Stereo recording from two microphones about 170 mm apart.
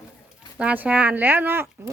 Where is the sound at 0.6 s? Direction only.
10° right (ahead or behind).